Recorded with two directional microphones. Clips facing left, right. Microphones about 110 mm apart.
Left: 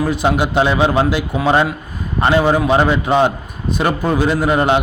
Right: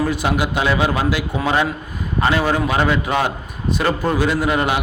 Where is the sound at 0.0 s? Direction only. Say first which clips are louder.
Left 3 dB; 20° left (ahead or behind).